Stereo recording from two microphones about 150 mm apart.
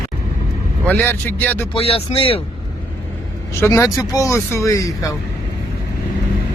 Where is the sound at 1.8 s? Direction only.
40° left (ahead or behind).